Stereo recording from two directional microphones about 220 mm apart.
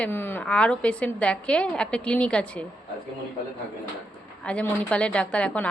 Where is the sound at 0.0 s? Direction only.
10° left (ahead or behind).